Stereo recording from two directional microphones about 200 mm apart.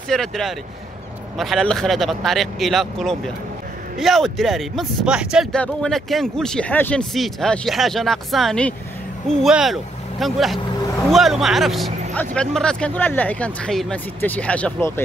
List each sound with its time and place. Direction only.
0.1 s speech: centre (ahead or behind)